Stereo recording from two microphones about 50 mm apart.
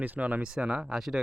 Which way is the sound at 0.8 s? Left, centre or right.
Centre.